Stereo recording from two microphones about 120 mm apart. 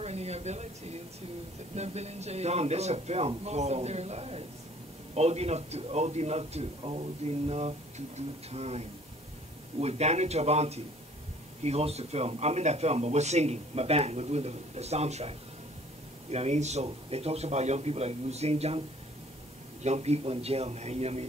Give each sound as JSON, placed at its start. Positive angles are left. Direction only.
{"t": 0.0, "sound": "a sound", "side_deg": -60}
{"t": 1.8, "sound": "speech", "side_deg": -65}
{"t": 19.8, "sound": "speech", "side_deg": -65}